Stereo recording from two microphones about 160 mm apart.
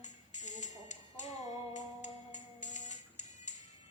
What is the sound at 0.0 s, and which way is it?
Music, 50° left (ahead or behind).